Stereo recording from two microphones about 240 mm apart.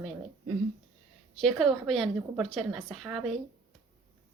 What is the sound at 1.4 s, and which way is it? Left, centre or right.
A woman's voice, centre.